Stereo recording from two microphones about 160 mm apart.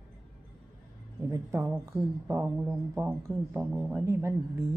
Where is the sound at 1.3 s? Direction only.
20° right (ahead or behind).